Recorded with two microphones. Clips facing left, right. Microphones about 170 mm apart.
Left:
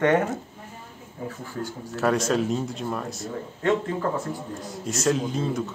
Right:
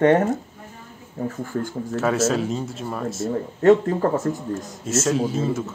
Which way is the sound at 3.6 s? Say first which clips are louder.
Right 8 dB; 40° right (ahead or behind).